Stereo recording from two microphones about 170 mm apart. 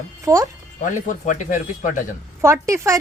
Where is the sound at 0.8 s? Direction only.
50° left (ahead or behind).